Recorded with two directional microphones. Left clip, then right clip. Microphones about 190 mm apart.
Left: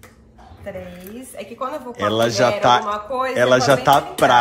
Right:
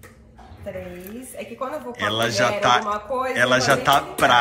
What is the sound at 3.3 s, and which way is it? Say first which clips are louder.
A woman's voice: left 4 dB; 25° left (ahead or behind).